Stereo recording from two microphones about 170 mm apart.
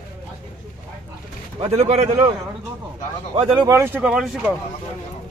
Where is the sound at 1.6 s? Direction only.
40° right (ahead or behind).